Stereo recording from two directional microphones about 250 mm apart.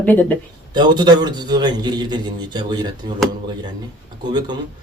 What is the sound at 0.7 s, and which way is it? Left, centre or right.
A man's voice, centre.